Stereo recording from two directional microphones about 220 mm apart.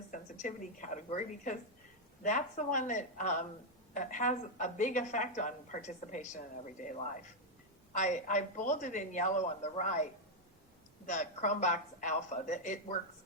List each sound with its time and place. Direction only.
0.1 s a woman's voice: 35° left (ahead or behind)